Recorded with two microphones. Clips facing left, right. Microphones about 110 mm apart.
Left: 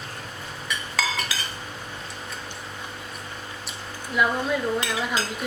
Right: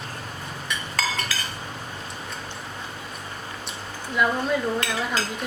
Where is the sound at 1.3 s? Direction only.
15° left (ahead or behind).